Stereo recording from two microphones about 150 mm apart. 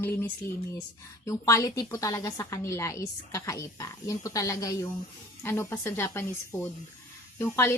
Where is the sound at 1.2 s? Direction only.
20° left (ahead or behind).